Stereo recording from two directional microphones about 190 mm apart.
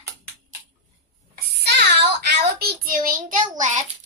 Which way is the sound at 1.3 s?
60° right (ahead or behind).